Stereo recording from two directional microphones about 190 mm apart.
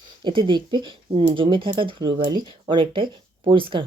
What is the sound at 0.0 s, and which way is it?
Speech, 25° right (ahead or behind).